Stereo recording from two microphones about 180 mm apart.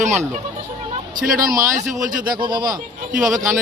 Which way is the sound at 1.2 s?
50° right (ahead or behind).